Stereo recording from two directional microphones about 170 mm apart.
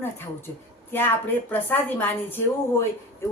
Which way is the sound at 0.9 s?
10° left (ahead or behind).